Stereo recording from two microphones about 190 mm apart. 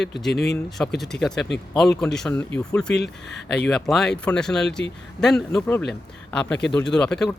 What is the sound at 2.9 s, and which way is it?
Speech, 60° left (ahead or behind).